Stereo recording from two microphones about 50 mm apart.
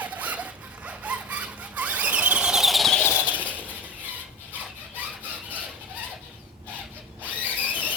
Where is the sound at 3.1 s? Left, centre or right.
Right.